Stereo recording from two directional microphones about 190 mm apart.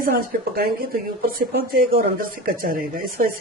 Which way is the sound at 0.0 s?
50° right (ahead or behind).